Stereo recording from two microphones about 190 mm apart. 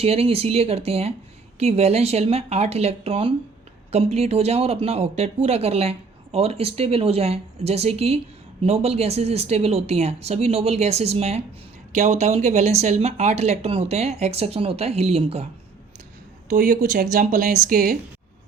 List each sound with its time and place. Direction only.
0.0 s speech: 30° right (ahead or behind)
16.5 s speech: 45° right (ahead or behind)